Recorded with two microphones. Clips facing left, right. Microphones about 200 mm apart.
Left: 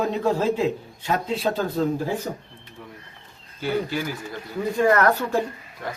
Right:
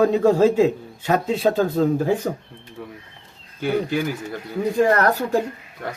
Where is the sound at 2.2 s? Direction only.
70° right (ahead or behind).